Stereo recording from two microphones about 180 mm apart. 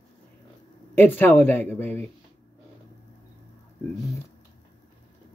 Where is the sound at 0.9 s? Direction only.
10° left (ahead or behind).